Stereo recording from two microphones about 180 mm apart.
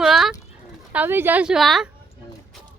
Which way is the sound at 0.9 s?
10° right (ahead or behind).